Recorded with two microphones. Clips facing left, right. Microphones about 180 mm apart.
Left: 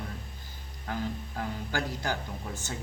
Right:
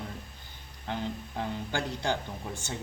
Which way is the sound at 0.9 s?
25° right (ahead or behind).